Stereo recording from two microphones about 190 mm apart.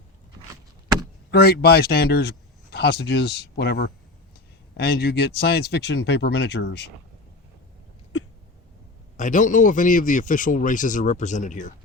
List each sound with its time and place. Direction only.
1.3 s speech: 55° left (ahead or behind)
9.1 s a man's voice: 40° left (ahead or behind)